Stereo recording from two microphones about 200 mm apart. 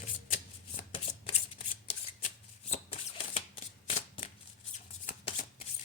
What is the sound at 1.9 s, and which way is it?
Shuffling cards, 25° left (ahead or behind).